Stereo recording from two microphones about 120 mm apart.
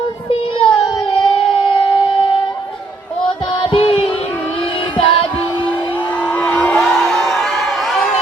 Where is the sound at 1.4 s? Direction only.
45° left (ahead or behind).